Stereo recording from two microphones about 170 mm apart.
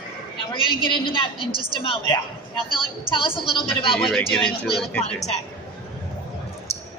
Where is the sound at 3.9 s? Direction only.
Centre (ahead or behind).